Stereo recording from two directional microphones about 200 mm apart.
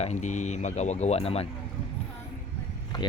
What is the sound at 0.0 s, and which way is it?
Speech, 35° left (ahead or behind).